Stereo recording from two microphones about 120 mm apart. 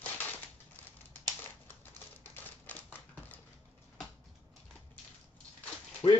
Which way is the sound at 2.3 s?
15° left (ahead or behind).